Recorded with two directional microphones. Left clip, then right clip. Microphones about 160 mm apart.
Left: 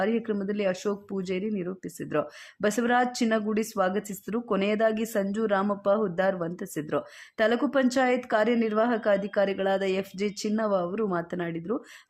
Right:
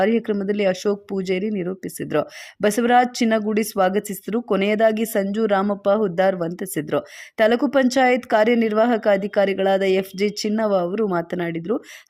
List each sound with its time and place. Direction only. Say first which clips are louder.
0.0 s speech: right 8 dB; 35° right (ahead or behind)